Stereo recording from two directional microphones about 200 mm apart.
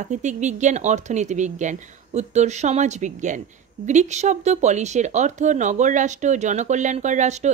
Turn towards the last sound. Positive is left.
turn(degrees=-35)  # may be behind; listen again after turning